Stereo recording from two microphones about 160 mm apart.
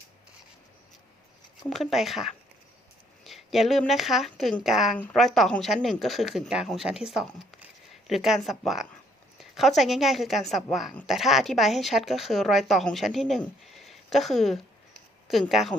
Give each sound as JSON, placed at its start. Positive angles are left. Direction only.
{"t": 1.7, "sound": "speech", "side_deg": 0}